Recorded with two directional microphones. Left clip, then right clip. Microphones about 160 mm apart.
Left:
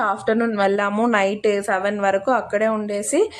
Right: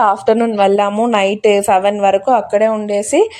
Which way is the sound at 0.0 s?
15° right (ahead or behind).